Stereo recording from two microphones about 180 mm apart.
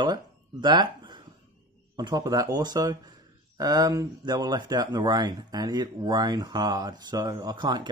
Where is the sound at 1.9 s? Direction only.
20° right (ahead or behind).